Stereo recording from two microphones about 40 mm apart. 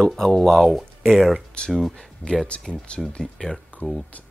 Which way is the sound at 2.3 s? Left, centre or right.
Left.